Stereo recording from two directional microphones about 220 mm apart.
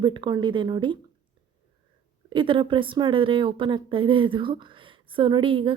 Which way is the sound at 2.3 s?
25° right (ahead or behind).